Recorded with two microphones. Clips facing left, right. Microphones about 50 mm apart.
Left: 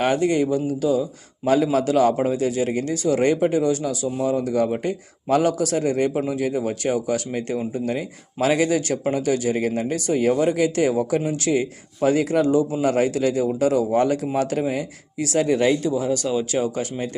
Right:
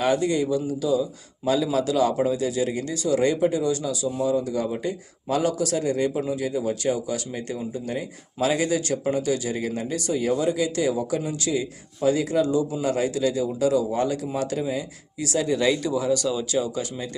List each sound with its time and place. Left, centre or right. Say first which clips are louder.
0.0 s speech: left 2 dB; left
6.2 s speech: left 2 dB; left
15.9 s speech: left 1 dB; left
16.5 s speech: left 2 dB; left